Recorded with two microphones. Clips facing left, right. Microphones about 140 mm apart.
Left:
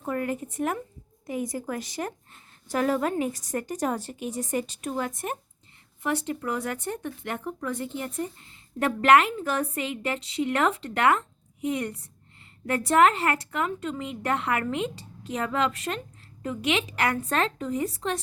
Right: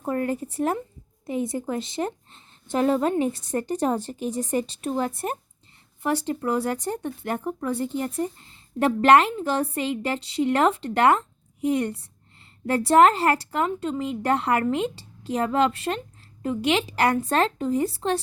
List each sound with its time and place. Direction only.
0.0 s speech: 30° right (ahead or behind)